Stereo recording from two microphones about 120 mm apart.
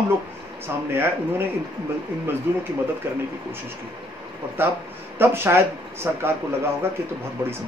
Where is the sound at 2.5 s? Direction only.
20° right (ahead or behind).